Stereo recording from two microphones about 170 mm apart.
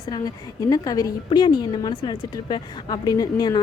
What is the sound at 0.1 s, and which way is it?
A woman's voice, 20° left (ahead or behind).